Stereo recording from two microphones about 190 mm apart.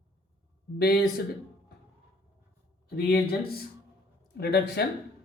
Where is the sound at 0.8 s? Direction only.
55° left (ahead or behind).